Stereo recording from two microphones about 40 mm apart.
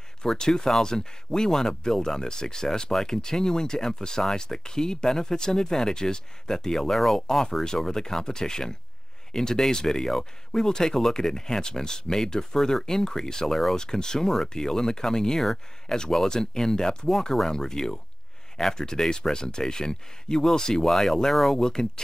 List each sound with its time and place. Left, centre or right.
0.3 s speech: centre
21.5 s speech: centre